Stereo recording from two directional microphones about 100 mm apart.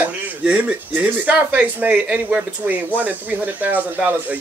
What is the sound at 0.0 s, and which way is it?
Speech, 15° right (ahead or behind).